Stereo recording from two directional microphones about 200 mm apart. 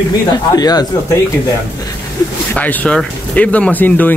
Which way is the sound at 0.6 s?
20° left (ahead or behind).